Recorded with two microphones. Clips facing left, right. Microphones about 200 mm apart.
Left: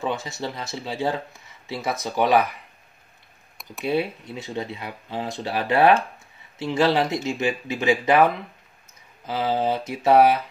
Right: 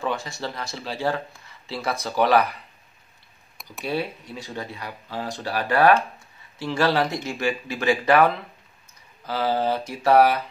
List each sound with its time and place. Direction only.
0.0 s speech: 20° left (ahead or behind)
3.8 s speech: 20° left (ahead or behind)